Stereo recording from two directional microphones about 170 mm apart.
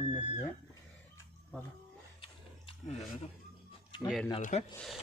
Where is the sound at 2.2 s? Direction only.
30° left (ahead or behind).